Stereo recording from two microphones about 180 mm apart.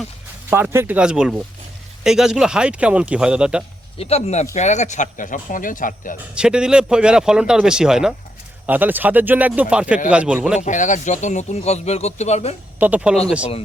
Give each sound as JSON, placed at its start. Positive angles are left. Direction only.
{"t": 0.5, "sound": "speech", "side_deg": -15}
{"t": 3.9, "sound": "speech", "side_deg": 35}
{"t": 6.3, "sound": "speech", "side_deg": -5}
{"t": 10.6, "sound": "speech", "side_deg": 45}
{"t": 12.8, "sound": "speech", "side_deg": -5}